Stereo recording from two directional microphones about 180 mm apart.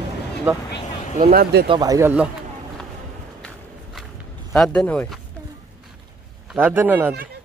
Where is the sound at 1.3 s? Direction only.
55° right (ahead or behind).